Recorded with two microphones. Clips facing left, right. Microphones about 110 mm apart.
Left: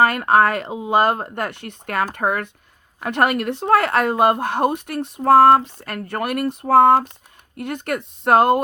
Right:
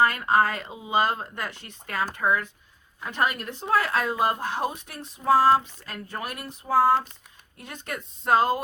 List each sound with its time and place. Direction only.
0.0 s speech: 65° left (ahead or behind)